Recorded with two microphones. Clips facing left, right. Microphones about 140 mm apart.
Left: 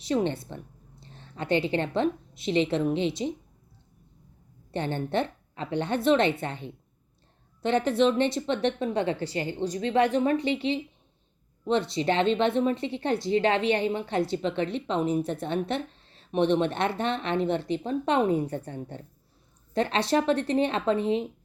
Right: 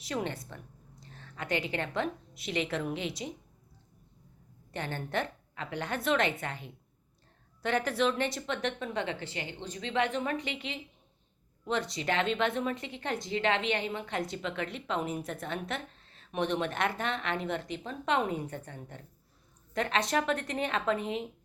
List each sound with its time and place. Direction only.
0.0 s a woman's voice: 25° left (ahead or behind)
4.7 s a woman's voice: 30° left (ahead or behind)